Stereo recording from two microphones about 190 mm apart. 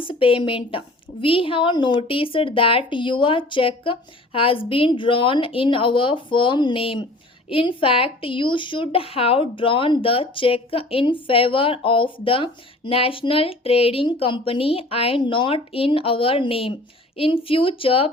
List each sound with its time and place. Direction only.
0.0 s speech: 25° left (ahead or behind)